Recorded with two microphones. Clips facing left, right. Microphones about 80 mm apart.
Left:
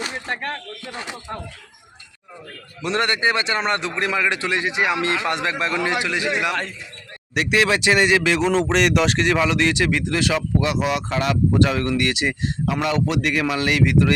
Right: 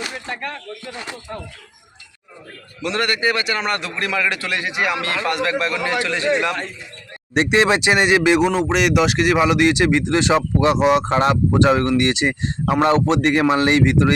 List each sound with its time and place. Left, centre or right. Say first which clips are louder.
1.3 s speech: even; left
2.8 s a man's voice: even; left; by 6.6 s centre
7.3 s speech: right 3 dB; right